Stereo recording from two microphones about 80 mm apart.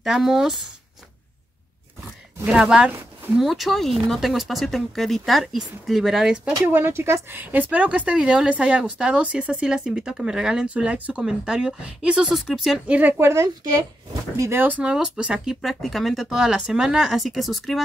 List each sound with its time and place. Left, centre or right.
0.0 s speech: centre
2.4 s speech: centre
6.7 s speech: right; by 12.8 s centre
12.8 s speech: centre
13.2 s speech: right
14.6 s speech: centre
15.6 s speech: centre